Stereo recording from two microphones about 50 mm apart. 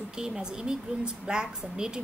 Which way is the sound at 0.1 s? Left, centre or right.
Centre.